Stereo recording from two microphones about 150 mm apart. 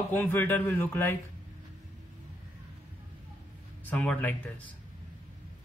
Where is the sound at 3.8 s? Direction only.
10° left (ahead or behind).